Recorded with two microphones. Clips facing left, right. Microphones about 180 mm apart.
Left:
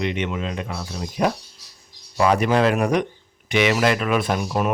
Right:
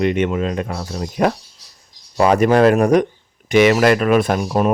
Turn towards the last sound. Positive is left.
turn(degrees=-40)  # may be behind; listen again after turning